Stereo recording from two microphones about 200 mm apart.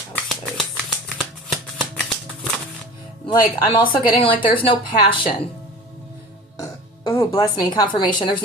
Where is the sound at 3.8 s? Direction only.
25° left (ahead or behind).